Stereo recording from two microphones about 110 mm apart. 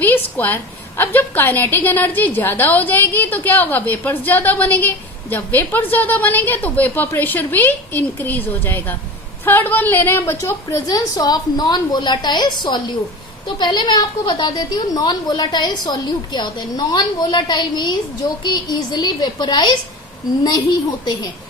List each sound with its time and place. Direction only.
0.3 s a woman's voice: 15° left (ahead or behind); by 21.2 s 40° left (ahead or behind)